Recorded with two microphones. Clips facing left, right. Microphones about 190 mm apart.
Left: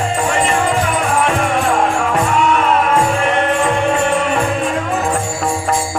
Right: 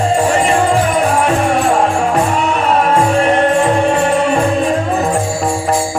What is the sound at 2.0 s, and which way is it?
Music, 35° right (ahead or behind).